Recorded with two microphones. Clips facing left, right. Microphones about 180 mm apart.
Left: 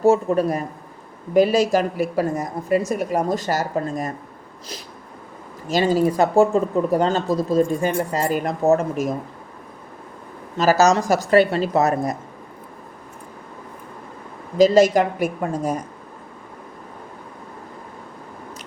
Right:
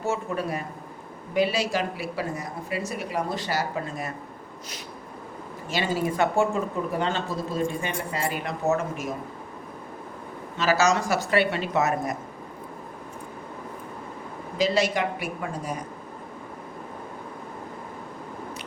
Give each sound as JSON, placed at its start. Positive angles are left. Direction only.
{"t": 0.0, "sound": "a woman's voice", "side_deg": 40}
{"t": 5.6, "sound": "speech", "side_deg": 40}
{"t": 10.6, "sound": "speech", "side_deg": 40}
{"t": 14.6, "sound": "a woman's voice", "side_deg": 45}